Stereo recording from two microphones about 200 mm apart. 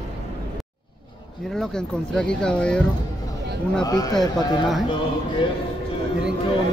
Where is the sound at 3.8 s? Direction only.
20° left (ahead or behind).